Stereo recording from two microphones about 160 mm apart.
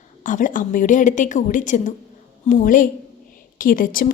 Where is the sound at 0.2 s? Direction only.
55° left (ahead or behind).